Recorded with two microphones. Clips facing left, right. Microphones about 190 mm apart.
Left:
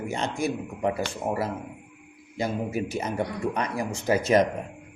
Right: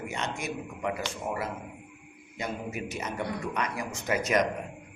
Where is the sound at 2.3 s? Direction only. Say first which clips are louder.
Left 7 dB; 35° left (ahead or behind).